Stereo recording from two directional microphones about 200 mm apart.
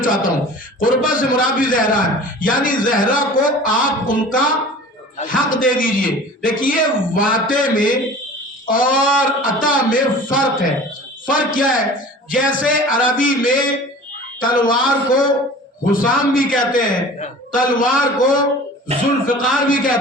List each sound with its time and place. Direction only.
0.0 s a man's voice: 40° left (ahead or behind)